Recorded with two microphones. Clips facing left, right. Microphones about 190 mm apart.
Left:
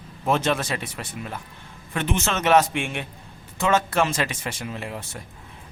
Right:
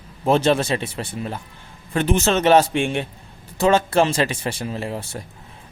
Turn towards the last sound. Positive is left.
turn(degrees=-35)  # may be behind; listen again after turning